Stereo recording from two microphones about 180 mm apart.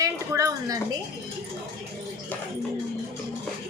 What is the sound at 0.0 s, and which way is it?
Speech, 20° right (ahead or behind).